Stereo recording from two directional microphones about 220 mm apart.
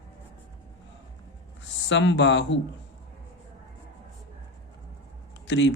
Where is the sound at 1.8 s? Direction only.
55° left (ahead or behind).